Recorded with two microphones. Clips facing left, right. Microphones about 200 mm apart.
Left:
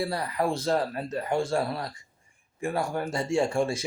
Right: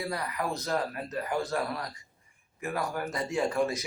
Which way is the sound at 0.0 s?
30° left (ahead or behind).